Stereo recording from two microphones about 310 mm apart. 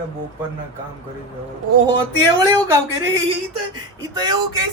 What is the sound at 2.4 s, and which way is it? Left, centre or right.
Speech, centre.